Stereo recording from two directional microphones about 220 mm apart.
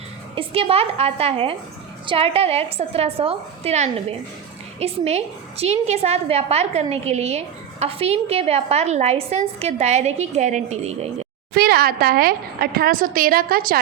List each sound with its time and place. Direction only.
0.3 s a woman's voice: 25° right (ahead or behind)
11.5 s a woman's voice: 45° right (ahead or behind)